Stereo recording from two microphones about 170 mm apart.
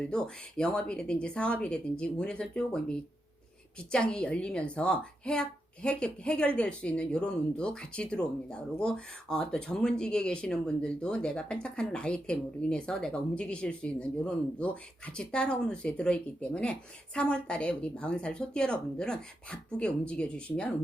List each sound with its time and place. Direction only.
0.1 s speech: 5° left (ahead or behind)
3.9 s speech: 5° left (ahead or behind)